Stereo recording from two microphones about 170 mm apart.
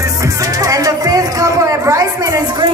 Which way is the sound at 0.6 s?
20° right (ahead or behind).